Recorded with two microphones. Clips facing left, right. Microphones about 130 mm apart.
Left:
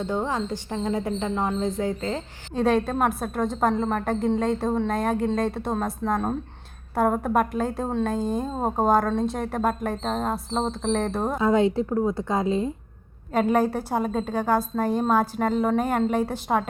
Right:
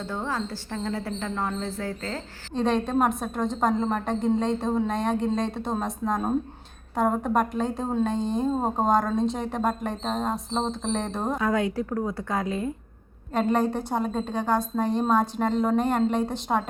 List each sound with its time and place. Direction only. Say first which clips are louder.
0.0 s speech: left 4 dB; 20° left (ahead or behind)
2.5 s a woman's voice: left 2 dB; 5° left (ahead or behind)
11.3 s speech: left 6 dB; 25° left (ahead or behind)
13.3 s a woman's voice: left 2 dB; 5° left (ahead or behind)